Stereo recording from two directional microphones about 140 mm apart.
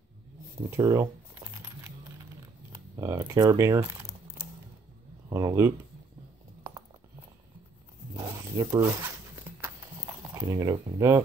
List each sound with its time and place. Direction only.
0.7 s speech: 25° right (ahead or behind)
3.0 s speech: 20° right (ahead or behind)
5.3 s speech: 20° right (ahead or behind)
8.1 s zipper: 25° right (ahead or behind)
9.6 s a sound: 15° right (ahead or behind)